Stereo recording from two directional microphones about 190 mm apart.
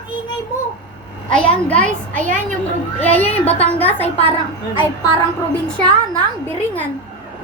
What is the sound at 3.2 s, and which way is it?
Speech, 30° left (ahead or behind).